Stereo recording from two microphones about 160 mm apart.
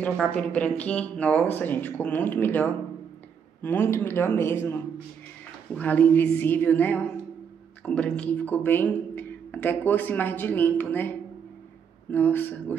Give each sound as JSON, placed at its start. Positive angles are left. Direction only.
{"t": 0.0, "sound": "speech", "side_deg": 5}